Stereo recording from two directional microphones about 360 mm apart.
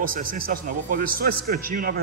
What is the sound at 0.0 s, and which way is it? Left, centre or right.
A man's voice, right.